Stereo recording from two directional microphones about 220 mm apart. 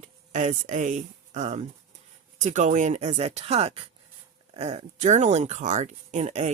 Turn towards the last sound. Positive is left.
turn(degrees=-30)  # may be behind; listen again after turning